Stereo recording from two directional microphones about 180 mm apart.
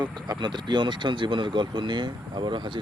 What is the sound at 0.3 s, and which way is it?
Speech, 25° right (ahead or behind).